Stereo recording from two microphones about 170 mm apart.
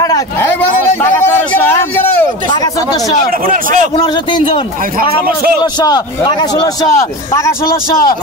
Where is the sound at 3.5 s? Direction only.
55° right (ahead or behind).